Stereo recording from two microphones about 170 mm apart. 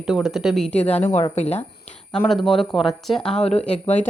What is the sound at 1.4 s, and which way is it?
Speech, 40° left (ahead or behind).